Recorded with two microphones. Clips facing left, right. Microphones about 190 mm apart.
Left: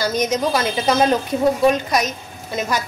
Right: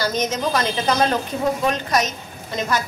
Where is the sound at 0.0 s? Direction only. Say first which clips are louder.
Left 3 dB; 10° left (ahead or behind).